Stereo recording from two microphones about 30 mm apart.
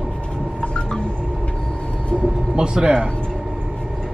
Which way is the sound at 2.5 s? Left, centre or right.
Right.